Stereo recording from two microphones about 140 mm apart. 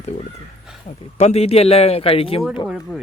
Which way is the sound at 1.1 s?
50° left (ahead or behind).